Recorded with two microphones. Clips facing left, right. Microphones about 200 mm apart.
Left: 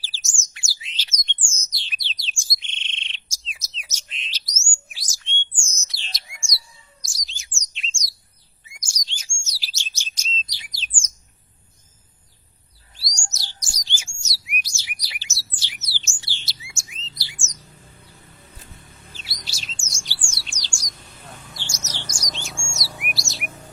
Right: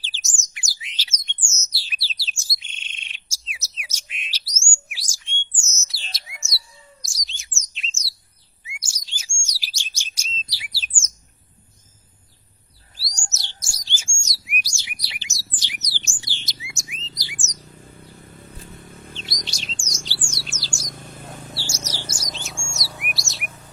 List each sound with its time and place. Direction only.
0.0 s bird: 20° right (ahead or behind)
2.4 s chirp: 5° right (ahead or behind)
5.7 s bird: 5° right (ahead or behind)
7.0 s chirp: centre (ahead or behind)
10.4 s bird: 10° right (ahead or behind)
13.6 s bird: 15° left (ahead or behind)
14.2 s bird: 5° left (ahead or behind)
14.6 s bird: 15° right (ahead or behind)
19.1 s bird: 5° left (ahead or behind)
20.4 s bird: 5° right (ahead or behind)
20.8 s bird: 50° right (ahead or behind)
21.6 s bird: 10° right (ahead or behind)